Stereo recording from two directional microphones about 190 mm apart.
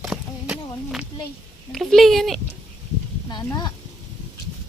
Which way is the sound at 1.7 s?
Centre (ahead or behind).